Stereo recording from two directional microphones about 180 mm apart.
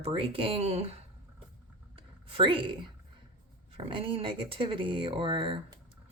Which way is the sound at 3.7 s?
30° right (ahead or behind).